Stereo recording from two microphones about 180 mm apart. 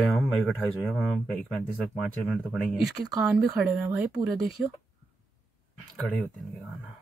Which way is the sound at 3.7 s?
20° right (ahead or behind).